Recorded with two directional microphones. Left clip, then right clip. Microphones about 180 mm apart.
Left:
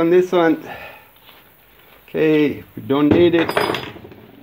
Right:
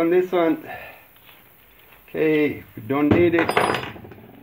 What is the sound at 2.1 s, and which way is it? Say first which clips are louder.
Speech: left 4 dB; 35° left (ahead or behind).